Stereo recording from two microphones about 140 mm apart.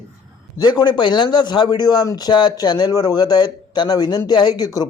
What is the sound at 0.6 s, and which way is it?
Speech, 30° left (ahead or behind).